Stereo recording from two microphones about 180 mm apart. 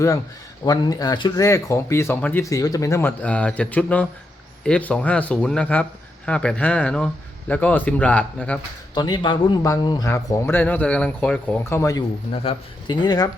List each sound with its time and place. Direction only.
0.6 s speech: 20° left (ahead or behind)
9.0 s speech: 25° left (ahead or behind)
12.3 s speech: 35° left (ahead or behind)